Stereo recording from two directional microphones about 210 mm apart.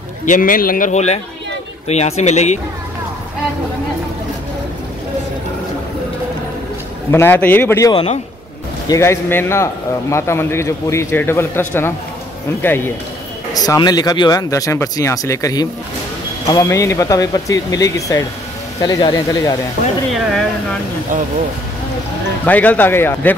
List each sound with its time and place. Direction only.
0.2 s a man's voice: 40° left (ahead or behind)
7.1 s a man's voice: 10° left (ahead or behind)
22.4 s a man's voice: 5° left (ahead or behind)